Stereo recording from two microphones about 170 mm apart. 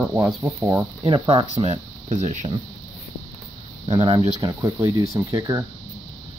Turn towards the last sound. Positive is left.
turn(degrees=-20)  # may be behind; listen again after turning